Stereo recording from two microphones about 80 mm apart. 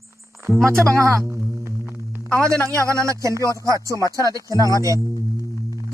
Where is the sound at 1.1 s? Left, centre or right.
Right.